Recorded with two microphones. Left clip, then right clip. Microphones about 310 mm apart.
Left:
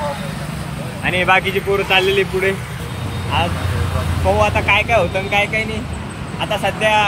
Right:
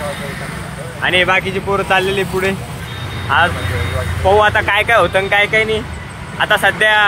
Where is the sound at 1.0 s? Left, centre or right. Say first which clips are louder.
Right 2 dB; centre.